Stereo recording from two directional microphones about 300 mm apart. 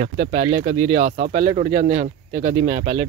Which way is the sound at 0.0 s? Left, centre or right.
Right.